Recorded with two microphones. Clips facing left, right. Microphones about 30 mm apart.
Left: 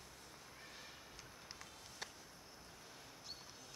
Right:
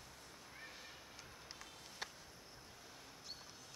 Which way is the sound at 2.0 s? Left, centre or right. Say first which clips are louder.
Right 2 dB; centre.